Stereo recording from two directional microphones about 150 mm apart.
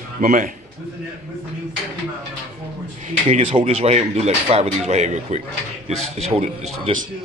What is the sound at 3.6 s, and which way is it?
Speech, 50° right (ahead or behind).